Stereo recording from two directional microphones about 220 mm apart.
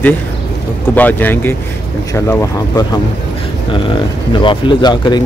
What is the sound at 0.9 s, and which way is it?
A man's voice, 10° left (ahead or behind).